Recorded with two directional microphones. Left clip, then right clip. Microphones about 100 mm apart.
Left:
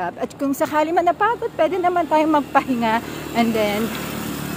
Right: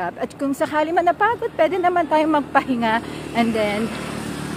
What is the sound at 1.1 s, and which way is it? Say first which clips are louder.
A woman's voice: even; centre (ahead or behind).